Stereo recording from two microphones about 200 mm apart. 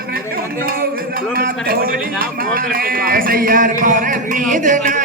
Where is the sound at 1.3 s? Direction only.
50° right (ahead or behind).